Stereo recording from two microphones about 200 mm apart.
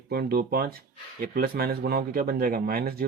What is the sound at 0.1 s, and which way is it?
Speech, 50° right (ahead or behind).